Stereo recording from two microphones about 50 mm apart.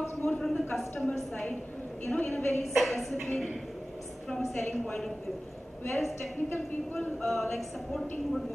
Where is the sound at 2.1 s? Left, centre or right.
Left.